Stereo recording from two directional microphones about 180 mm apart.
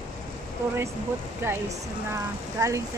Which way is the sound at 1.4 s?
15° right (ahead or behind).